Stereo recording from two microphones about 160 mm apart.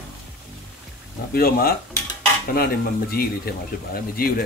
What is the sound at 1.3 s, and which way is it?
Speech, 70° left (ahead or behind).